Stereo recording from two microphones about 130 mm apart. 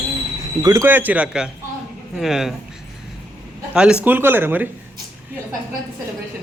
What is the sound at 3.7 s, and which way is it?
A man's voice, 10° right (ahead or behind).